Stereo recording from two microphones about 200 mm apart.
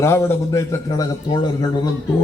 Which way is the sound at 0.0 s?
15° left (ahead or behind).